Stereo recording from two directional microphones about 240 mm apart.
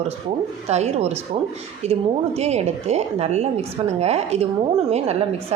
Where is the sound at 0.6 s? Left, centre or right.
Right.